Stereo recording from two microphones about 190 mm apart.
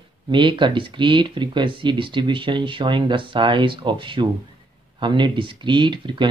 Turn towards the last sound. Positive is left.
turn(degrees=-25)  # may be behind; listen again after turning